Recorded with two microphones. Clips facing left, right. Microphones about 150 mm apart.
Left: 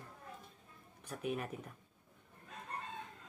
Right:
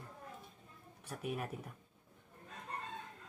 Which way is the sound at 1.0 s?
5° right (ahead or behind).